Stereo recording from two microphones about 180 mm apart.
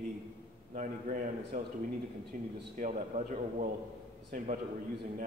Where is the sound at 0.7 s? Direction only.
45° right (ahead or behind).